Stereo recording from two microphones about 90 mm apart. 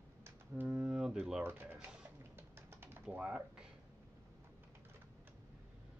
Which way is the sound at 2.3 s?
25° right (ahead or behind).